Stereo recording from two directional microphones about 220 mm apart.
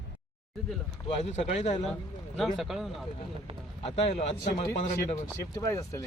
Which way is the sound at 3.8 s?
25° left (ahead or behind).